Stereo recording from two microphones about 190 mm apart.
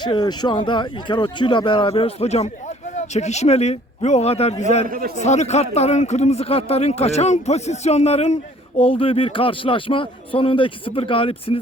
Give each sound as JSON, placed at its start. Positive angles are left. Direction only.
{"t": 0.0, "sound": "speech", "side_deg": 20}
{"t": 4.9, "sound": "a man's voice", "side_deg": -50}
{"t": 5.2, "sound": "a man's voice", "side_deg": 35}